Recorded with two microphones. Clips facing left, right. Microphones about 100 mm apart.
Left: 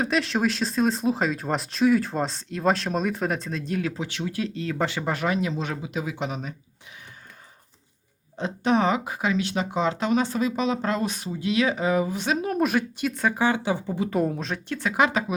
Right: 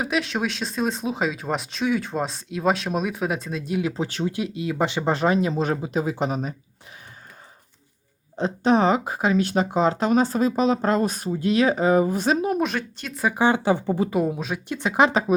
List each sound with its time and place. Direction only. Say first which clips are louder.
0.0 s speech: left 1 dB; 5° right (ahead or behind)
3.9 s speech: right 5 dB; 35° right (ahead or behind)
4.3 s speech: right 2 dB; 15° right (ahead or behind); by 6.5 s 40° right (ahead or behind)
8.4 s speech: right 3 dB; 35° right (ahead or behind)
12.5 s speech: left 2 dB; 5° left (ahead or behind)
13.7 s speech: right 5 dB; 45° right (ahead or behind)
14.1 s speech: right 1 dB; 5° right (ahead or behind)
14.7 s speech: right 3 dB; 20° right (ahead or behind)